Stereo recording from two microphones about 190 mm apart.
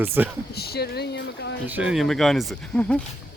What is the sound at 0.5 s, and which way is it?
Speech, 55° left (ahead or behind).